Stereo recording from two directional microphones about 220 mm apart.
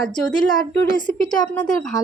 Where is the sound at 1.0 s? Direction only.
40° left (ahead or behind).